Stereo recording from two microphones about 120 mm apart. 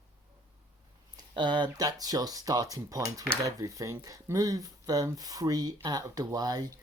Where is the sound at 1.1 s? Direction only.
40° right (ahead or behind).